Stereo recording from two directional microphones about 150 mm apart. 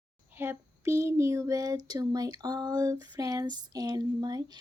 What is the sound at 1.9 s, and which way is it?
Speech, 25° right (ahead or behind).